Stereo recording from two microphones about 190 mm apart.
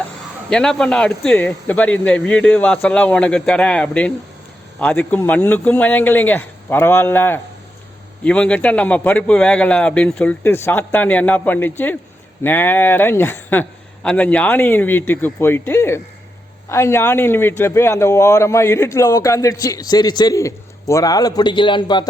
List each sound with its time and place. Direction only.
0.5 s a man's voice: 5° left (ahead or behind); by 22.0 s 25° left (ahead or behind)